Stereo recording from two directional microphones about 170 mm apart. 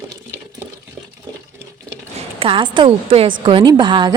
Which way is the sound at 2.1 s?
35° right (ahead or behind).